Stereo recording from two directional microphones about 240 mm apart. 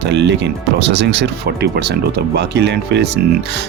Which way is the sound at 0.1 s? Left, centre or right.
Right.